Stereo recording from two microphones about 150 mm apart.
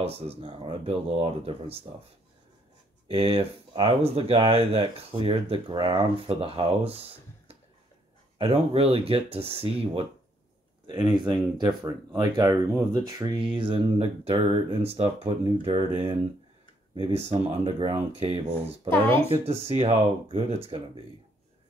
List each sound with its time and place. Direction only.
0.0 s speech: 40° right (ahead or behind)
3.1 s speech: 40° right (ahead or behind)
10.9 s speech: 25° right (ahead or behind)
19.7 s speech: 40° right (ahead or behind)